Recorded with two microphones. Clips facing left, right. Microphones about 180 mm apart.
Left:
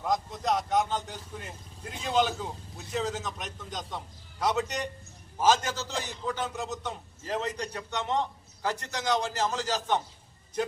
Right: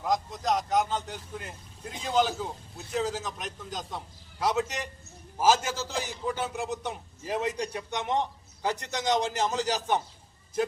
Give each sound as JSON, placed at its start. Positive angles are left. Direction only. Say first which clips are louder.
{"t": 0.0, "sound": "a man's voice", "louder": "right 1 dB", "side_deg": 0}